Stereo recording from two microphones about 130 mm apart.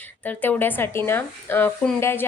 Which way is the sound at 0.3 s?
15° left (ahead or behind).